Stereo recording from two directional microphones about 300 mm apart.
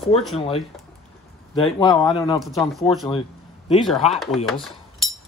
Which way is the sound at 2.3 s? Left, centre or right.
Centre.